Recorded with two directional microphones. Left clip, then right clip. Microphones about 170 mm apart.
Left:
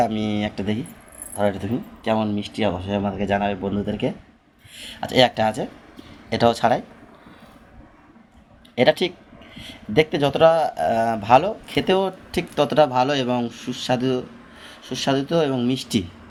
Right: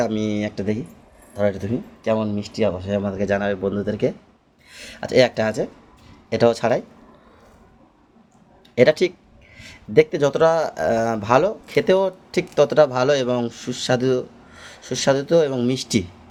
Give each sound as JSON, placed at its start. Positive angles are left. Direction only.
{"t": 0.0, "sound": "speech", "side_deg": -50}
{"t": 8.7, "sound": "speech", "side_deg": -50}